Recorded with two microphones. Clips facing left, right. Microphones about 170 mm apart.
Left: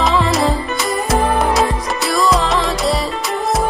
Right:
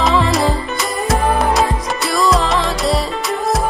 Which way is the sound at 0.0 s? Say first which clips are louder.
Even; centre (ahead or behind).